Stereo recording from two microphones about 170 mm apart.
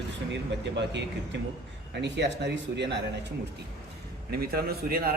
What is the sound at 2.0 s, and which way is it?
Speech, 90° right.